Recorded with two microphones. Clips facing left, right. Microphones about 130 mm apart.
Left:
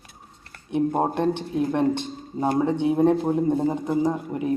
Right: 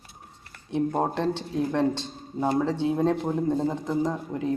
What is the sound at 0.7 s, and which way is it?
Speech, 15° left (ahead or behind).